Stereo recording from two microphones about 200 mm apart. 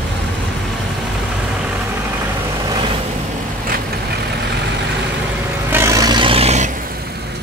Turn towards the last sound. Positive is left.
turn(degrees=-35)  # may be behind; listen again after turning